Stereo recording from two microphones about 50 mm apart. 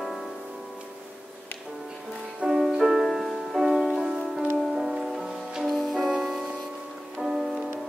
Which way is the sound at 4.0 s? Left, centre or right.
Centre.